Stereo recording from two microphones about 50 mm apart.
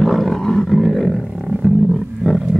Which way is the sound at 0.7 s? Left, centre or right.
Centre.